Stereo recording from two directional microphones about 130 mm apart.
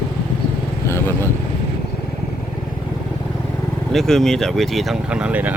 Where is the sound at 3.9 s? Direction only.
5° left (ahead or behind).